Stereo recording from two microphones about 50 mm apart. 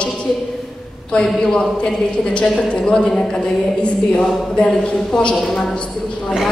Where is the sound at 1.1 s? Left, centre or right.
Centre.